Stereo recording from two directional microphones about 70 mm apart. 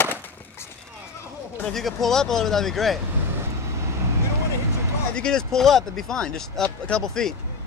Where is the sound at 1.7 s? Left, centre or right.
Centre.